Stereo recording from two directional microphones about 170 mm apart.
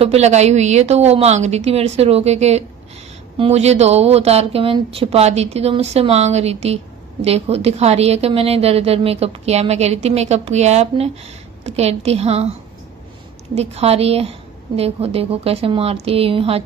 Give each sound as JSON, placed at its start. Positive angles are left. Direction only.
{"t": 0.0, "sound": "speech", "side_deg": -40}
{"t": 13.6, "sound": "speech", "side_deg": -40}